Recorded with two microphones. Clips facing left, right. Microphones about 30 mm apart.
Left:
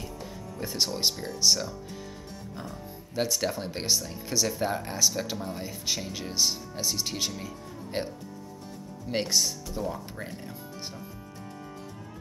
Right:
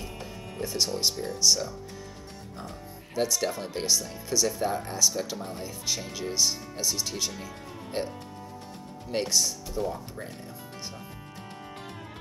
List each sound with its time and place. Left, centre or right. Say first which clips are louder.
0.7 s speech: even; centre
3.2 s speech: right 1 dB; centre
4.3 s speech: right 1 dB; centre
9.1 s speech: even; centre
9.8 s speech: right 3 dB; left